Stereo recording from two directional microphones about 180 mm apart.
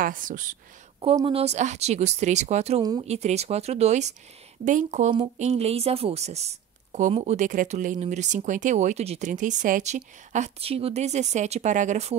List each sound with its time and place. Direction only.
0.0 s speech: 50° right (ahead or behind)
1.0 s speech: 30° right (ahead or behind)
2.8 s speech: 20° right (ahead or behind)
3.1 s speech: 35° right (ahead or behind)